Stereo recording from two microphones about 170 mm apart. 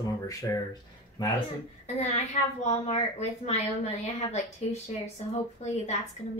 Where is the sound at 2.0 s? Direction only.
40° left (ahead or behind).